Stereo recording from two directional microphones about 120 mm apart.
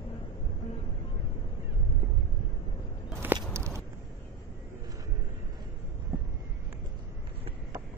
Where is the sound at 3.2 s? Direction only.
15° right (ahead or behind).